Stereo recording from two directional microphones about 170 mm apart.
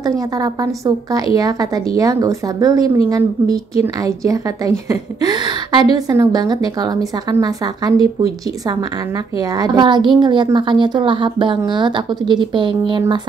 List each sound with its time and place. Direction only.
0.0 s speech: 20° right (ahead or behind)